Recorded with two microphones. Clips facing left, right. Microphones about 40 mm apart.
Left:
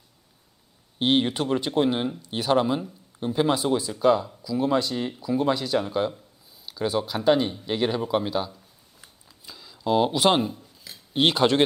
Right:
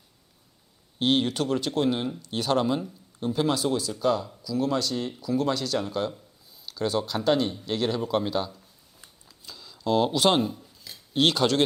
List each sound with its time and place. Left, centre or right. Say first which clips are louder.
0.9 s speech: left 2 dB; centre
9.5 s scissors: left 2 dB; centre
11.1 s speech: left 2 dB; centre